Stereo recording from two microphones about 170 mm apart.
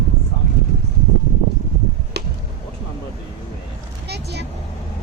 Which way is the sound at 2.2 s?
80° right.